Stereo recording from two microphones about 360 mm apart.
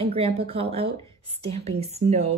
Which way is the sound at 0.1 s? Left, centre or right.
Centre.